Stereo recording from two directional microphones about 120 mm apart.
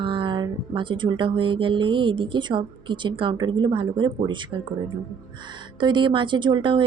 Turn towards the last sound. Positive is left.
turn(degrees=-45)  # may be behind; listen again after turning